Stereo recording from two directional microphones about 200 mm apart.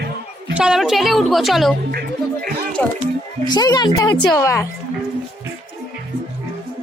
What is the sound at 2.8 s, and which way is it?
Speech, 5° left (ahead or behind).